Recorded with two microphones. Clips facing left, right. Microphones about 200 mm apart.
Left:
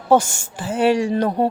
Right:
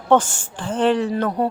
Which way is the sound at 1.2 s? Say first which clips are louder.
Left 2 dB; 25° left (ahead or behind).